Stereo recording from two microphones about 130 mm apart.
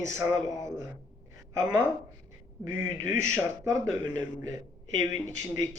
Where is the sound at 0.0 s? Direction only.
20° right (ahead or behind).